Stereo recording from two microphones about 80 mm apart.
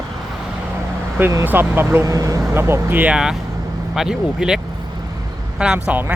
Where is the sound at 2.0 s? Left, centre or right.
Right.